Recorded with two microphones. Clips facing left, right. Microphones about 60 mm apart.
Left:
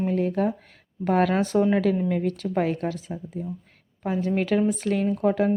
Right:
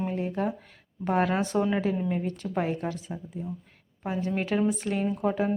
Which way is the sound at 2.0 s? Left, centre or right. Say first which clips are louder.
Left 5 dB; left.